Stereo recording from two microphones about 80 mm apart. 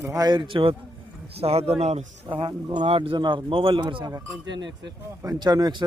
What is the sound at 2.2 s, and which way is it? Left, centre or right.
A man's voice, right.